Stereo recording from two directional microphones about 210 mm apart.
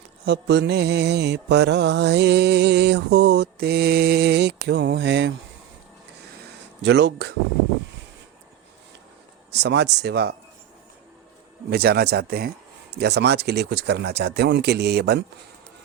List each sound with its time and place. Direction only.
0.3 s mantra: 55° right (ahead or behind)
6.8 s mantra: 55° right (ahead or behind)
9.5 s mantra: 50° right (ahead or behind)
11.7 s mantra: 50° right (ahead or behind)